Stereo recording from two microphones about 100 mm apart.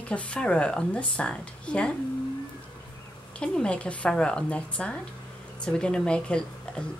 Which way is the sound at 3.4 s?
10° left (ahead or behind).